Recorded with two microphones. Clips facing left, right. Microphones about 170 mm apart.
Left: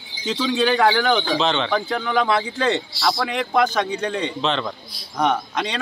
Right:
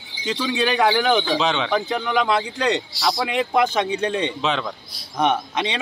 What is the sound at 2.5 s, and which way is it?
A man's voice, 15° right (ahead or behind).